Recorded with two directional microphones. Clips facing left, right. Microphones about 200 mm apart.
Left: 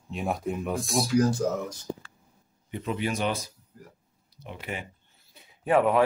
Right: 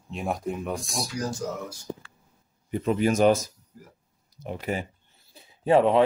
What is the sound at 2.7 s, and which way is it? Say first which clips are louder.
A man's voice: right 6 dB; 40° right (ahead or behind).